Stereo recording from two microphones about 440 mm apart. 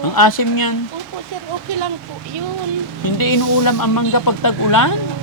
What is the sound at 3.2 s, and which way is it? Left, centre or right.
Speech, left.